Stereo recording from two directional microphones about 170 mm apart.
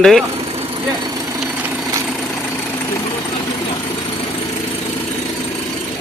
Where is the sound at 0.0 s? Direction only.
Centre (ahead or behind).